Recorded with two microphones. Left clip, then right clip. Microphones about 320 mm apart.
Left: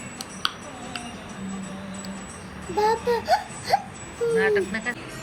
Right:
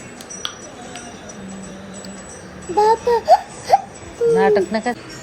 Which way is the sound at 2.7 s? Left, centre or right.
Centre.